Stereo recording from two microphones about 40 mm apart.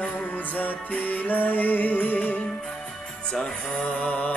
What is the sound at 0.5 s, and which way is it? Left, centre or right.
Music, left.